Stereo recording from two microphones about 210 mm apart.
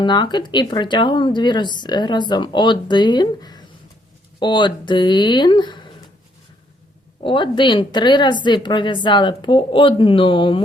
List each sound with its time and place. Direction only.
0.0 s speech: 20° left (ahead or behind)
7.2 s speech: 25° left (ahead or behind)